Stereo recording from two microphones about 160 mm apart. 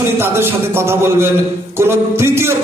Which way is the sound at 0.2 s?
15° right (ahead or behind).